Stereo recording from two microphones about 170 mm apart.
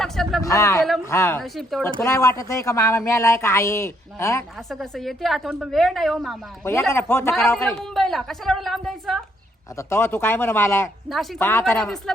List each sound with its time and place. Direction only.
0.0 s a sound: centre (ahead or behind)
0.4 s speech: 20° left (ahead or behind)
0.8 s a woman's voice: centre (ahead or behind)
1.0 s speech: 15° left (ahead or behind)
1.4 s a woman's voice: centre (ahead or behind)
1.8 s speech: 15° left (ahead or behind)
4.7 s a woman's voice: centre (ahead or behind)
6.9 s speech: 15° left (ahead or behind)
7.3 s a woman's voice: 5° left (ahead or behind)
9.7 s speech: 15° left (ahead or behind)
11.1 s a woman's voice: centre (ahead or behind)
11.3 s speech: 15° left (ahead or behind)
11.8 s a woman's voice: 5° left (ahead or behind)